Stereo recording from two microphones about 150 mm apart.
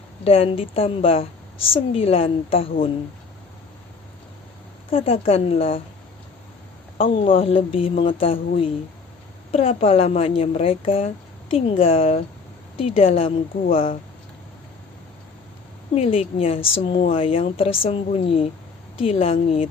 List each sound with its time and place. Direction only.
0.3 s speech: 40° left (ahead or behind)
4.9 s speech: 40° left (ahead or behind)
7.0 s speech: 35° left (ahead or behind)
16.0 s speech: 40° left (ahead or behind)